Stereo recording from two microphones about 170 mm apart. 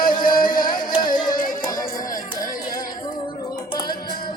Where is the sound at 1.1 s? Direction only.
25° left (ahead or behind).